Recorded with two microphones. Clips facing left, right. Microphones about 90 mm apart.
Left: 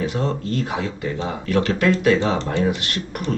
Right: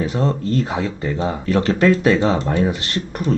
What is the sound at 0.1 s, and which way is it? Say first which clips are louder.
Speech: right 3 dB; 35° right (ahead or behind).